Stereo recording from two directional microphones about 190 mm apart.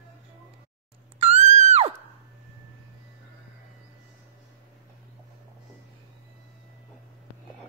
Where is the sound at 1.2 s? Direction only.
35° right (ahead or behind).